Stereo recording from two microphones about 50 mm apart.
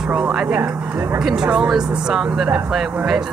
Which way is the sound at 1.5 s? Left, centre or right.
Centre.